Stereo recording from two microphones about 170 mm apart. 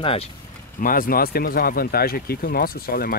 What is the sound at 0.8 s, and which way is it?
Speech, 55° left (ahead or behind).